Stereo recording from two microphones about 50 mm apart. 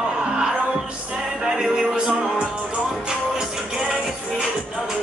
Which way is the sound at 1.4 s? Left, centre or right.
Centre.